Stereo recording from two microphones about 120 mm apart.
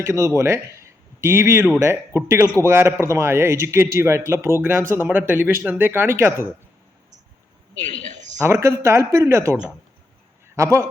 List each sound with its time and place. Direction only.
0.0 s speech: 25° right (ahead or behind)
8.1 s a sound: 85° right
8.4 s speech: 20° right (ahead or behind)